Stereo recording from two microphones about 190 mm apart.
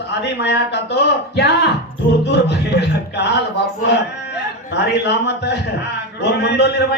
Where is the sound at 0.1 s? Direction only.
60° left (ahead or behind).